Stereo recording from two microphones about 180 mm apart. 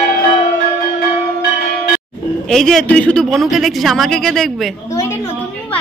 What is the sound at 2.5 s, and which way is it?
Speech, 5° left (ahead or behind).